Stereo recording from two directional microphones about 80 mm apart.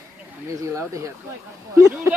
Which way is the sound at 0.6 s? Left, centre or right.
Right.